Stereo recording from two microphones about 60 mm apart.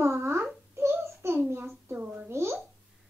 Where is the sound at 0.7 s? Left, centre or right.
Right.